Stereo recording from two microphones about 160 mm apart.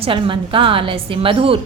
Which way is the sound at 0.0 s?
35° right (ahead or behind).